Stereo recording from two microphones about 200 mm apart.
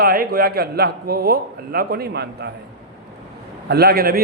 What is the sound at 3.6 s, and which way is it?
Speech, 50° right (ahead or behind).